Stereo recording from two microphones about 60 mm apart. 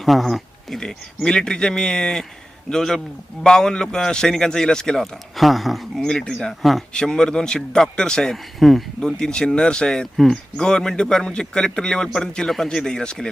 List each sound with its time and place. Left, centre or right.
0.0 s a man's voice: centre
5.4 s speech: centre
6.0 s a man's voice: centre
6.6 s speech: centre
6.9 s a man's voice: centre